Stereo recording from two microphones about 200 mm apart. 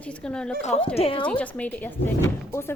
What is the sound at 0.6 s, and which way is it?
Speech, 35° left (ahead or behind).